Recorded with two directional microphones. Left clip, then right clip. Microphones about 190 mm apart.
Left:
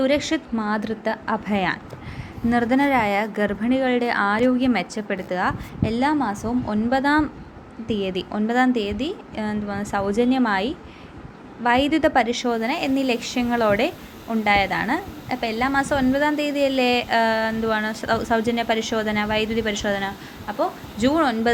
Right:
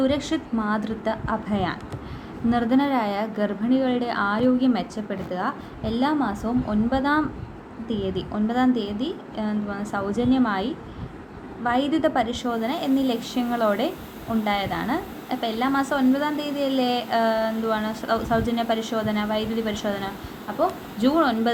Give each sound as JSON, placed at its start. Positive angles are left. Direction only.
{"t": 0.0, "sound": "a woman's voice", "side_deg": 35}